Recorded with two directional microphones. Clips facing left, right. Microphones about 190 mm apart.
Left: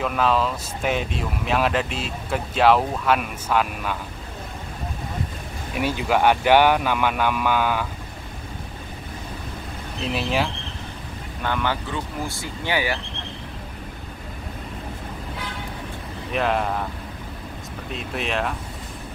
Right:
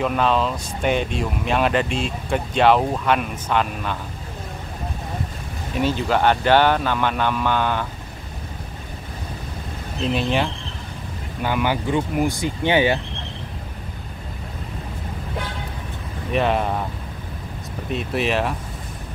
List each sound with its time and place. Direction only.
0.0 s speech: centre (ahead or behind)
5.8 s speech: 10° left (ahead or behind)
10.0 s speech: 5° left (ahead or behind)
11.4 s speech: 10° right (ahead or behind)
16.3 s speech: centre (ahead or behind)
17.9 s speech: centre (ahead or behind)